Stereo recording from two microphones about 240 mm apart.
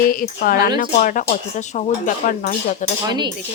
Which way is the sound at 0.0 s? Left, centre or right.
Left.